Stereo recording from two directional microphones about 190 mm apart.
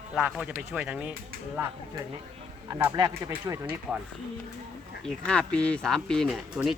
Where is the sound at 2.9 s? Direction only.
25° right (ahead or behind).